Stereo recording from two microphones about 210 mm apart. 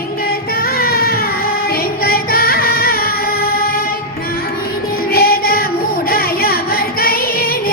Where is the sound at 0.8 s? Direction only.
45° left (ahead or behind).